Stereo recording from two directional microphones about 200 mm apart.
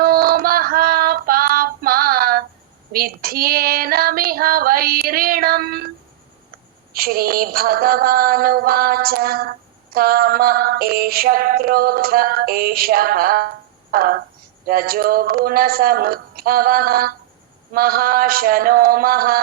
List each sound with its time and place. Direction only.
0.0 s female singing: 50° right (ahead or behind)
2.9 s mantra: 50° right (ahead or behind)
6.9 s mantra: 50° right (ahead or behind)